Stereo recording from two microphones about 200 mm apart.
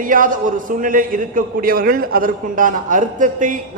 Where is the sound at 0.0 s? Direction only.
40° right (ahead or behind).